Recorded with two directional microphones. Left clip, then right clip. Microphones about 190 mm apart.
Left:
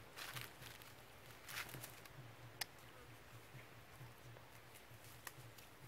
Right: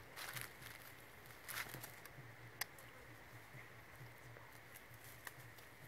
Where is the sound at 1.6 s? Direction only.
15° right (ahead or behind).